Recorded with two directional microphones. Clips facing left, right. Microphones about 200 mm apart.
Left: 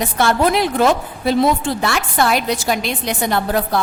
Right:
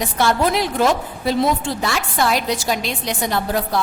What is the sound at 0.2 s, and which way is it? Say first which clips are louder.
A woman's voice: left 2 dB; 60° left (ahead or behind).